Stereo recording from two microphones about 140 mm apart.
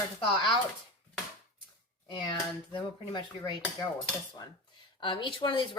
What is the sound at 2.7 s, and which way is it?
A woman's voice, 35° left (ahead or behind).